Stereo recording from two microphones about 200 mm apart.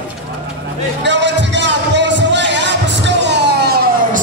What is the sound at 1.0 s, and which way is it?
Music, 60° right (ahead or behind).